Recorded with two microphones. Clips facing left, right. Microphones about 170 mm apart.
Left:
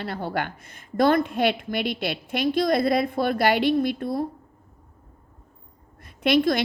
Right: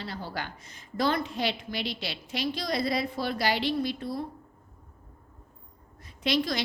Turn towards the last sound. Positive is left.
turn(degrees=55)  # may be behind; listen again after turning